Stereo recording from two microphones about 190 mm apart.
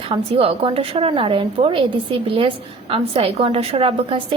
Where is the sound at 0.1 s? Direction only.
30° right (ahead or behind).